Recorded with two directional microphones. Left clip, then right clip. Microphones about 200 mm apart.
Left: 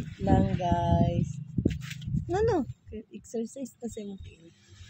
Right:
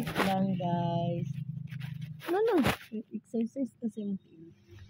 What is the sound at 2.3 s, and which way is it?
Speech, 15° right (ahead or behind).